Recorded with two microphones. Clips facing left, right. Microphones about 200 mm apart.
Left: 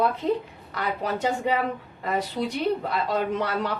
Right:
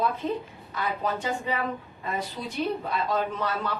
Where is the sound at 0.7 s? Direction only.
70° left (ahead or behind).